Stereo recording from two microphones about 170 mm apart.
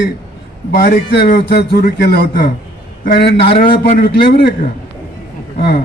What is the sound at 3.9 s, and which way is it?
Speech, 60° left (ahead or behind).